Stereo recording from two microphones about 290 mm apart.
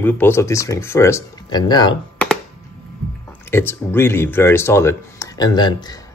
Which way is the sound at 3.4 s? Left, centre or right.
Centre.